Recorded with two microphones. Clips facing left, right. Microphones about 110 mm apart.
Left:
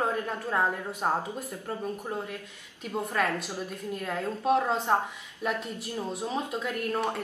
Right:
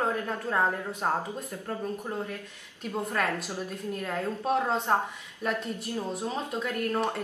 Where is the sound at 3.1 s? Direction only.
10° left (ahead or behind).